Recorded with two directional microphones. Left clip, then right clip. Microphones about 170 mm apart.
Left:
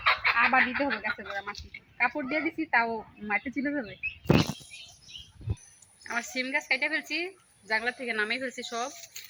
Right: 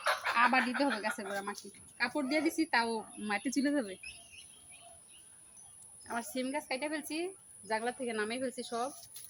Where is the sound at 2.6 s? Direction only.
15° left (ahead or behind).